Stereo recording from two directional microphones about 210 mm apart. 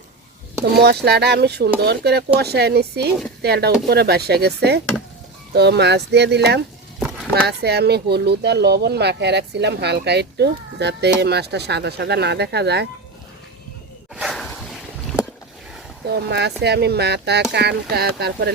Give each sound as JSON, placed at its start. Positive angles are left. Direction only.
{"t": 0.6, "sound": "speech", "side_deg": -50}
{"t": 14.2, "sound": "a sound", "side_deg": 0}
{"t": 16.0, "sound": "speech", "side_deg": -50}